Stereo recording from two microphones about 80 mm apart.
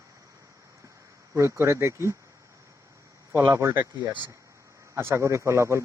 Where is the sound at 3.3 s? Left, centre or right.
Right.